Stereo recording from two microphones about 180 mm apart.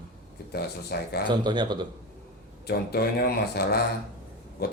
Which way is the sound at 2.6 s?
60° left (ahead or behind).